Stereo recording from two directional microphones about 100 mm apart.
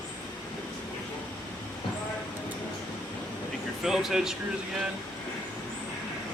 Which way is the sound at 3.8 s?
5° right (ahead or behind).